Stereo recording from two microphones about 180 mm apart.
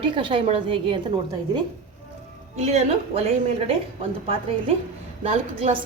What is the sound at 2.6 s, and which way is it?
Speech, 35° right (ahead or behind).